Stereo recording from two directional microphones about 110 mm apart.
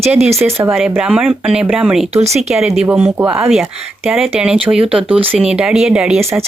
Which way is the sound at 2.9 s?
15° right (ahead or behind).